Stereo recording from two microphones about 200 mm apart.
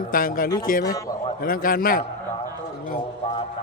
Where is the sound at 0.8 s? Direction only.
20° left (ahead or behind).